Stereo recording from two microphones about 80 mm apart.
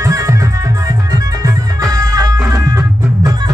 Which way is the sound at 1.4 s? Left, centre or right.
Right.